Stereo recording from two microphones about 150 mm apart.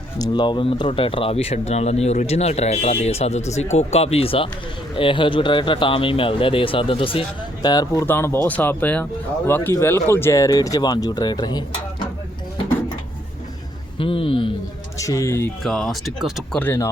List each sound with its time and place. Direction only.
0.2 s speech: 30° left (ahead or behind)
8.0 s speech: 15° left (ahead or behind)
14.0 s speech: 35° left (ahead or behind)
14.9 s speech: 20° left (ahead or behind)
15.6 s speech: centre (ahead or behind)
16.6 s speech: 15° left (ahead or behind)